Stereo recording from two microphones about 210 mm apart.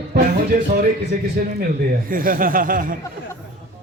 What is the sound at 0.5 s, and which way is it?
Speech, 40° right (ahead or behind).